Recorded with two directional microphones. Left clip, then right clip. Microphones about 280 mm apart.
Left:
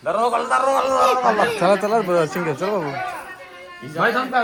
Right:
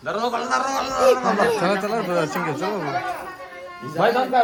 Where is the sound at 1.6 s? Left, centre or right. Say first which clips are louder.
Left 5 dB; centre.